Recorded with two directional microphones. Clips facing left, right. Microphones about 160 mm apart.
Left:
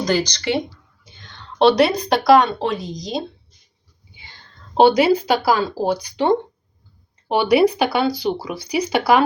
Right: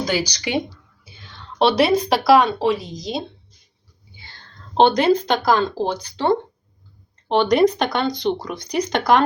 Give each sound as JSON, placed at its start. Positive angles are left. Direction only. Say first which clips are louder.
{"t": 0.0, "sound": "a woman's voice", "louder": "left 3 dB", "side_deg": -5}
{"t": 4.1, "sound": "whispering", "louder": "even", "side_deg": 15}
{"t": 4.8, "sound": "speech", "louder": "left 2 dB", "side_deg": 10}